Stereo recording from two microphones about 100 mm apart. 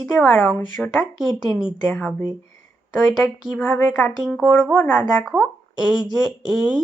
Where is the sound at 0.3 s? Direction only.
20° left (ahead or behind).